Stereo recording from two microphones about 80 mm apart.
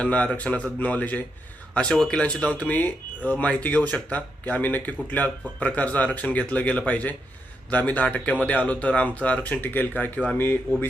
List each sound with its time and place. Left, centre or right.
0.0 s speech: centre